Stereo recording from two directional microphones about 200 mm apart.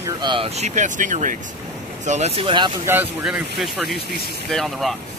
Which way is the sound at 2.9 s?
5° right (ahead or behind).